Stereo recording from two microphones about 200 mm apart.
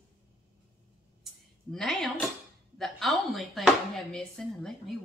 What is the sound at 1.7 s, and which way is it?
A woman's voice, centre (ahead or behind).